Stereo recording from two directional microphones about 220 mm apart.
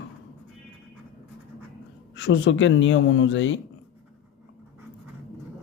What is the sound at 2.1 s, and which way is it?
Speech, 55° left (ahead or behind).